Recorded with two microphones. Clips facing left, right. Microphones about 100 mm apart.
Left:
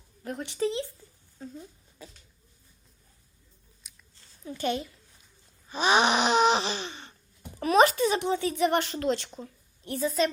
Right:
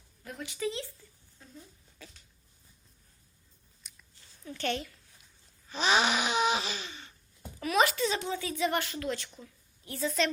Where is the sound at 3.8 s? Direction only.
5° left (ahead or behind).